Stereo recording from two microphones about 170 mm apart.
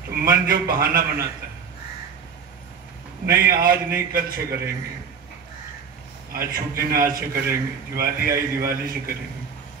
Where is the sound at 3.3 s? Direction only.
60° right (ahead or behind).